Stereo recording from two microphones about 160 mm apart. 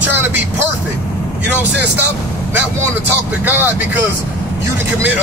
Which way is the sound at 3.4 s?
10° right (ahead or behind).